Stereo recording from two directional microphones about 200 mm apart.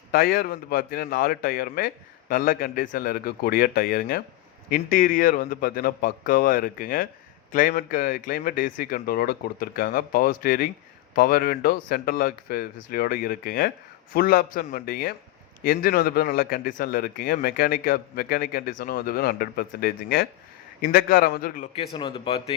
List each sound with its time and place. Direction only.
0.1 s a man's voice: 50° left (ahead or behind)
21.7 s speech: 25° left (ahead or behind)